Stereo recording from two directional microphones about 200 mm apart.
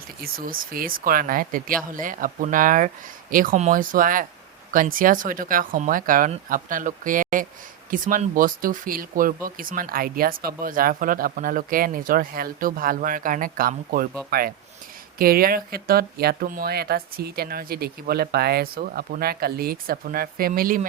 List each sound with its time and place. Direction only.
0.2 s speech: 45° right (ahead or behind)